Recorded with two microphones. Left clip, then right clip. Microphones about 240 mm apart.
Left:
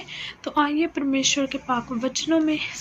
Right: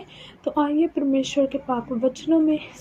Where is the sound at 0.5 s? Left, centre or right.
Centre.